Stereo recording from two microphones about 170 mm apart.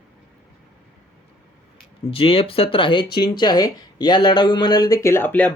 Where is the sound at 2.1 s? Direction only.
35° left (ahead or behind); by 5.5 s 10° left (ahead or behind).